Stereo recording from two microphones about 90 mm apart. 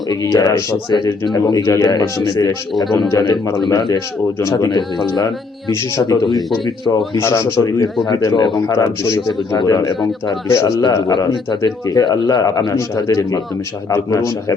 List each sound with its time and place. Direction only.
0.1 s speech: 40° left (ahead or behind)
5.1 s speech: 50° left (ahead or behind)
7.2 s speech: 30° left (ahead or behind)
8.3 s a man's voice: 60° left (ahead or behind)
8.6 s speech: 35° left (ahead or behind)
9.6 s speech: 50° left (ahead or behind)
10.5 s speech: 30° left (ahead or behind)
11.1 s speech: 55° left (ahead or behind)